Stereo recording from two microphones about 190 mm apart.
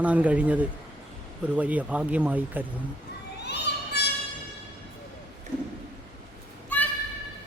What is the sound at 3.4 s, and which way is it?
Children playing, 60° left (ahead or behind).